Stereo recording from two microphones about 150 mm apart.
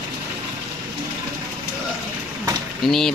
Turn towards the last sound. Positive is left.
turn(degrees=0)  # may be behind; listen again after turning